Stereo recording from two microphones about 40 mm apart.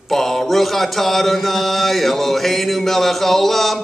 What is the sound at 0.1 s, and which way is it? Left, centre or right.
Mantra, centre.